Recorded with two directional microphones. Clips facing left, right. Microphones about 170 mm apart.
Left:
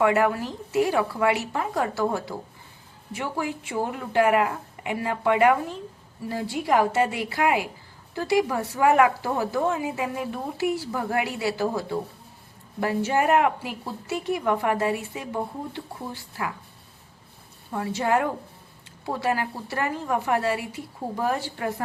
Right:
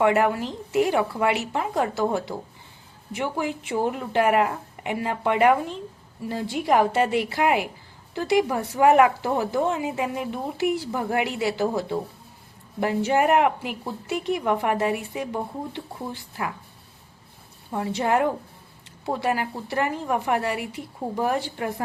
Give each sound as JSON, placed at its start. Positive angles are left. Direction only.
{"t": 0.0, "sound": "speech", "side_deg": -20}
{"t": 17.7, "sound": "speech", "side_deg": -20}